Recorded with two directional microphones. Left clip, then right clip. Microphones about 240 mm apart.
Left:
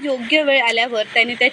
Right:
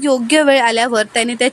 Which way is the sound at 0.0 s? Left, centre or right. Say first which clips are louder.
Right 5 dB; right.